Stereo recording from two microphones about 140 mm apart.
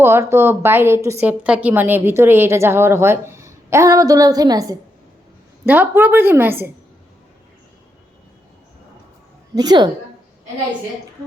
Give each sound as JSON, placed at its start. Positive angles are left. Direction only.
{"t": 0.0, "sound": "a woman's voice", "side_deg": -20}
{"t": 5.6, "sound": "a woman's voice", "side_deg": -15}
{"t": 9.6, "sound": "speech", "side_deg": -30}